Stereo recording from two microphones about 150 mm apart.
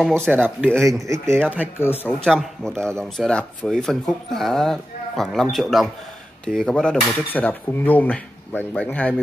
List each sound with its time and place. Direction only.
0.3 s speech: 15° right (ahead or behind)
1.8 s speech: 15° left (ahead or behind)
2.2 s speech: 5° left (ahead or behind)